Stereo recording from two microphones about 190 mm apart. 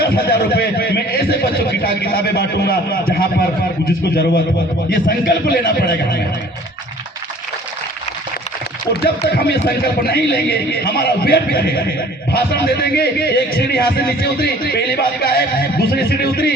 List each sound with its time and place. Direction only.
0.0 s speech: 55° left (ahead or behind)
4.9 s a man's voice: 50° left (ahead or behind)
8.9 s speech: 55° left (ahead or behind)